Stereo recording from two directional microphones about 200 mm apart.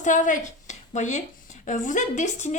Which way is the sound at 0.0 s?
40° left (ahead or behind).